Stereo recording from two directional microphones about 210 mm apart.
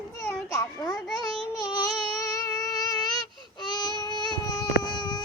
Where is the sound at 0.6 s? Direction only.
15° left (ahead or behind).